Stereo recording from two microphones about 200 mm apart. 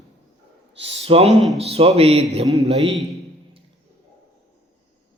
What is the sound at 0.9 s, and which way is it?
A man's voice, 30° right (ahead or behind).